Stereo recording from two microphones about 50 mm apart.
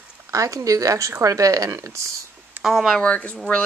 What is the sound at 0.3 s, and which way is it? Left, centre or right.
Speech, right.